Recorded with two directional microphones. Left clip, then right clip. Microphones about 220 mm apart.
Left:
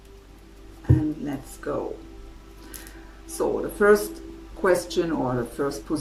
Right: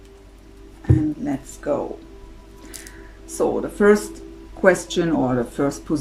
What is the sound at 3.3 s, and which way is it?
Speech, 30° right (ahead or behind).